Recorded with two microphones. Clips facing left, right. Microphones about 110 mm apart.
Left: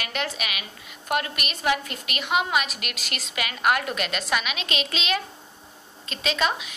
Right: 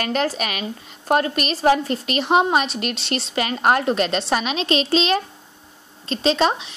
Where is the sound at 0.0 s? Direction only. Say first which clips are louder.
Right 8 dB; 40° right (ahead or behind).